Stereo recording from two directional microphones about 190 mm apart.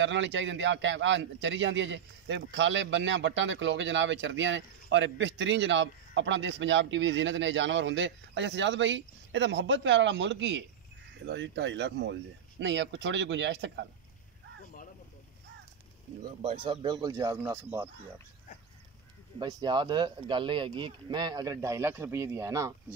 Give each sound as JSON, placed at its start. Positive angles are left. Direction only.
{"t": 0.0, "sound": "a man's voice", "side_deg": -75}
{"t": 16.3, "sound": "speech", "side_deg": -30}
{"t": 19.4, "sound": "speech", "side_deg": -25}